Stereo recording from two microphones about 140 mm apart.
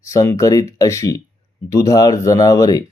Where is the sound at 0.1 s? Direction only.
25° left (ahead or behind).